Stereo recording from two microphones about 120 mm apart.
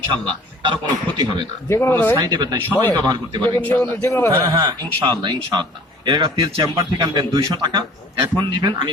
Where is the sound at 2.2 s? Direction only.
35° right (ahead or behind).